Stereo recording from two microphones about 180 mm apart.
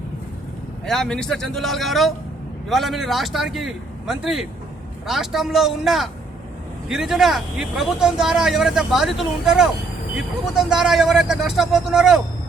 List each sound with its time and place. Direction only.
0.9 s speech: 5° left (ahead or behind)